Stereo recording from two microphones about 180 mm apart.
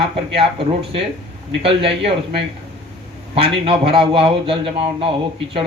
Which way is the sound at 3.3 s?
30° right (ahead or behind).